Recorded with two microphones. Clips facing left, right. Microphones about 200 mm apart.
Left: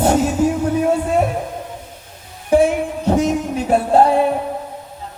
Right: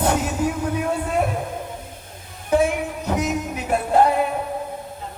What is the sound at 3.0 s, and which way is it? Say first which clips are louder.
Music: left 8 dB; 30° left (ahead or behind).